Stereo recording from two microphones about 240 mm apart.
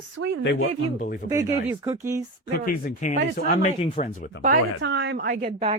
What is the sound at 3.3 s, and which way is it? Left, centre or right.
Speech, left.